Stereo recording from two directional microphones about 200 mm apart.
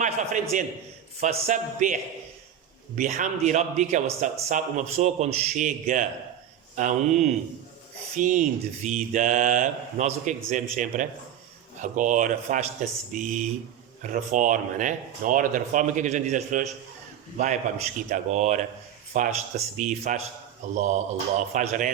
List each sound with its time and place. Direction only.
0.5 s speech: 40° right (ahead or behind)